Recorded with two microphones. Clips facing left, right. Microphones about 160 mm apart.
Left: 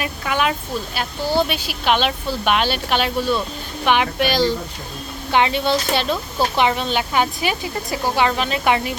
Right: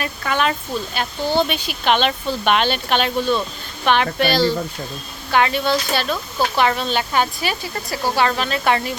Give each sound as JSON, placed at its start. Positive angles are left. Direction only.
{"t": 0.0, "sound": "speech", "side_deg": 10}